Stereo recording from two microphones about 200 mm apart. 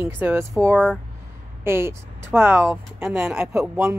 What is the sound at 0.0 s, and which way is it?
Speech, 10° right (ahead or behind).